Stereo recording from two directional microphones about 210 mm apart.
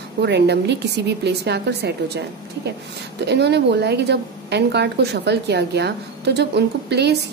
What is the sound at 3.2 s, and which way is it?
A woman's voice, 55° right (ahead or behind).